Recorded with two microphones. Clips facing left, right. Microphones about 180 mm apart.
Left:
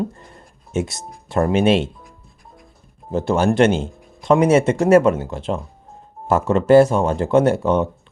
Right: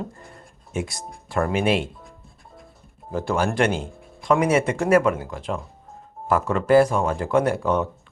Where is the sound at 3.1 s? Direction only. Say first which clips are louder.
Left 6 dB; 25° left (ahead or behind).